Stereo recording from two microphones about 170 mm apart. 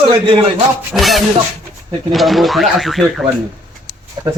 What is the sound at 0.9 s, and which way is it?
Speech, centre (ahead or behind).